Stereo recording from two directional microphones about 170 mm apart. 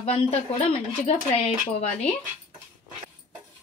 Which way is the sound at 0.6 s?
35° left (ahead or behind).